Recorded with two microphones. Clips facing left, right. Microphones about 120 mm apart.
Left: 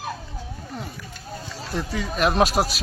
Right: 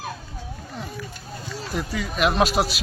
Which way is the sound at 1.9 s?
35° left (ahead or behind).